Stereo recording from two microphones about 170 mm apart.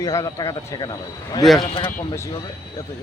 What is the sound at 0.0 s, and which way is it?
A man's voice, 20° left (ahead or behind).